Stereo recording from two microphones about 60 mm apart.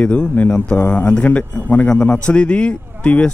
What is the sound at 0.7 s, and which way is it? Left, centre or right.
A man's voice, left.